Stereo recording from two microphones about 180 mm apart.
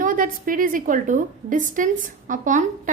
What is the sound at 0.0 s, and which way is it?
A woman's voice, 50° right (ahead or behind).